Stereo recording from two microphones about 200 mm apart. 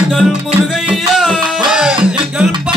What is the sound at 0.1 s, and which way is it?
Music, centre (ahead or behind).